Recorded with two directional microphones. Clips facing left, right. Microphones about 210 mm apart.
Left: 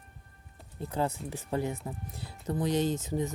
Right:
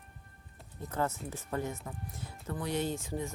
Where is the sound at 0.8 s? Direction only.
15° left (ahead or behind).